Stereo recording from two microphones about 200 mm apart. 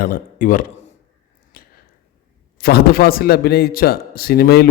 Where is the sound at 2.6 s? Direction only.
45° left (ahead or behind).